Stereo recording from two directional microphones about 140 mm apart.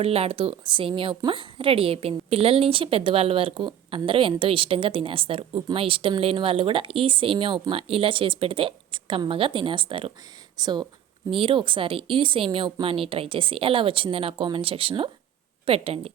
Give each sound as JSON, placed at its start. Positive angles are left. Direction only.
{"t": 0.0, "sound": "a woman's voice", "side_deg": -45}